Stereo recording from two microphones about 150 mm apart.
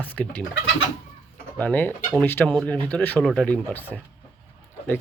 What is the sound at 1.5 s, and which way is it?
Speech, 10° left (ahead or behind).